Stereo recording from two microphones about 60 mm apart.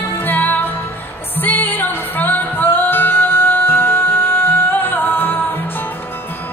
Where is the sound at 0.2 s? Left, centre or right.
Left.